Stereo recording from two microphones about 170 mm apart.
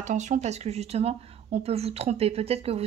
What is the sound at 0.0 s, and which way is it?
Speech, 45° right (ahead or behind).